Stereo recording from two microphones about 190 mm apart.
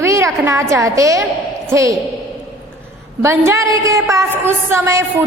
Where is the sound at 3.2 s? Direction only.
15° right (ahead or behind).